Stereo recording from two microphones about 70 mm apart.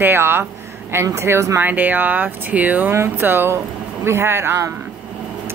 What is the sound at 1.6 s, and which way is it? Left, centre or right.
A woman's voice, right.